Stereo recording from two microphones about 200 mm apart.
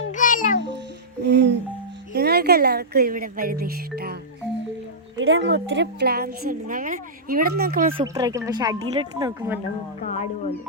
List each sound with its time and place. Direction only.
0.1 s music: 40° left (ahead or behind)
1.2 s music: 60° right (ahead or behind)
2.1 s speech: 50° right (ahead or behind)
5.1 s a woman's voice: 70° right (ahead or behind); by 7.9 s 45° right (ahead or behind)
7.9 s speech: 20° right (ahead or behind)